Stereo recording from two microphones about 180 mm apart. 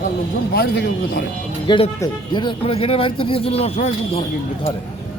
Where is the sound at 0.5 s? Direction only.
65° left (ahead or behind).